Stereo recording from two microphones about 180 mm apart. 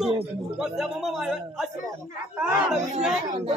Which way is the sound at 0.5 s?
5° right (ahead or behind).